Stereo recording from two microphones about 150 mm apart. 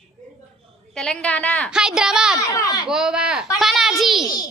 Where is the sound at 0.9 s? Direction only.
5° left (ahead or behind).